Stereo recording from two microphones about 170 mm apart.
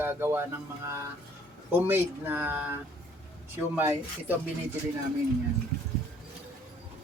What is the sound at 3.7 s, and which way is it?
Speech, 10° right (ahead or behind).